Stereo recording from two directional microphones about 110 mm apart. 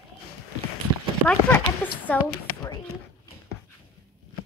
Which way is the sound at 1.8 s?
15° left (ahead or behind).